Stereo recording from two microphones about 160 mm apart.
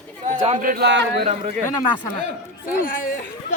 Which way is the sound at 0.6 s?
65° right (ahead or behind).